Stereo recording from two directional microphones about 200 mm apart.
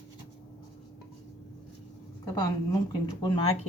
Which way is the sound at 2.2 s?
15° left (ahead or behind).